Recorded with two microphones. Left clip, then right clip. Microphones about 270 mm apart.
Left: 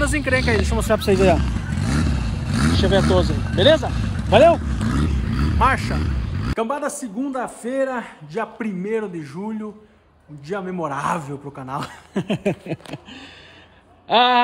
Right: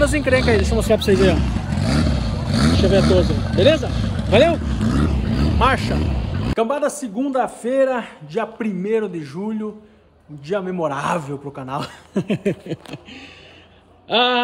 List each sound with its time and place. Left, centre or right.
0.0 s a man's voice: centre
1.5 s vehicle: centre
4.3 s speech: left
4.6 s a man's voice: centre